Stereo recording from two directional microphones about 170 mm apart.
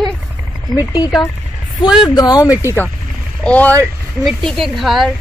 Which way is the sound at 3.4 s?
10° left (ahead or behind).